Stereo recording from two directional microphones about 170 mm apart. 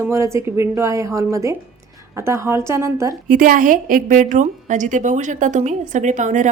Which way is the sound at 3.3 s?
55° right (ahead or behind).